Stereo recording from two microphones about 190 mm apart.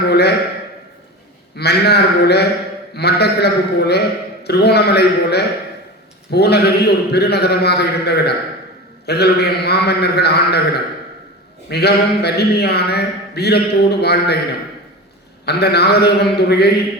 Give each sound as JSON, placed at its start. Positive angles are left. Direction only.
{"t": 0.1, "sound": "a man's voice", "side_deg": 60}
{"t": 1.5, "sound": "a man's voice", "side_deg": 60}
{"t": 11.7, "sound": "a man's voice", "side_deg": 60}
{"t": 15.4, "sound": "a man's voice", "side_deg": 60}